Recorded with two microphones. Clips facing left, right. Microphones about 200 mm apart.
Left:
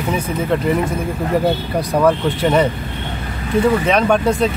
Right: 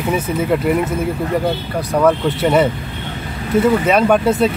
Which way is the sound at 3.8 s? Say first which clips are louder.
Right 2 dB; 5° right (ahead or behind).